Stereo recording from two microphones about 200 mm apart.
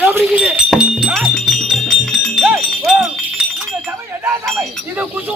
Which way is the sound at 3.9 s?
10° right (ahead or behind).